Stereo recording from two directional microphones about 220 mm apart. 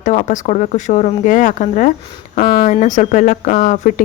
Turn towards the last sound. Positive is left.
turn(degrees=35)  # may be behind; listen again after turning